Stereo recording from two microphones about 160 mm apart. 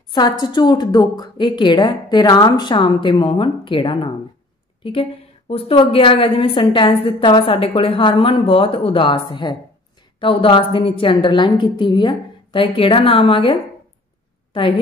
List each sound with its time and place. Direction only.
0.1 s a woman's voice: 25° left (ahead or behind)